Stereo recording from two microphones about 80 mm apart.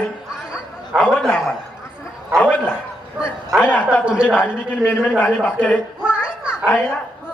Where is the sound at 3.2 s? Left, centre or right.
Centre.